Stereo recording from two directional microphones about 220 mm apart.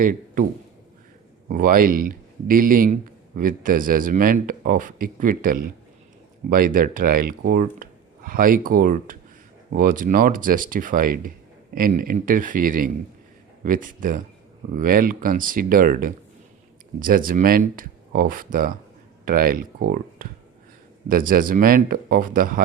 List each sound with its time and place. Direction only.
0.0 s a man's voice: 40° right (ahead or behind)
1.5 s speech: 40° right (ahead or behind)